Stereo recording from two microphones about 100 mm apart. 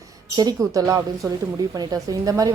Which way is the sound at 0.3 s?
40° right (ahead or behind).